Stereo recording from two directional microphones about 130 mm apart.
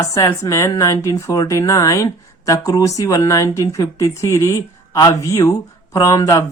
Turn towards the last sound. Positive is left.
turn(degrees=25)  # may be behind; listen again after turning